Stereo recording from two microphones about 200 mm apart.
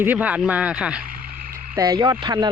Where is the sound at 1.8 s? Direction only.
20° right (ahead or behind).